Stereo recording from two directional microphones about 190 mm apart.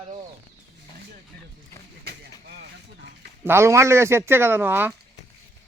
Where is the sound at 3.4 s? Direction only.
15° right (ahead or behind).